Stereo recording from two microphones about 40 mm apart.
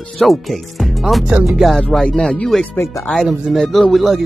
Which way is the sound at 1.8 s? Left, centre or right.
Centre.